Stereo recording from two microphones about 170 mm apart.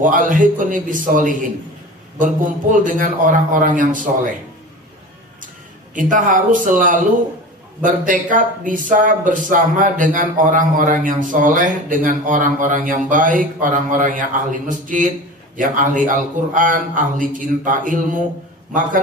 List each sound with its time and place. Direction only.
0.0 s speech: 50° right (ahead or behind)
5.9 s speech: 50° right (ahead or behind)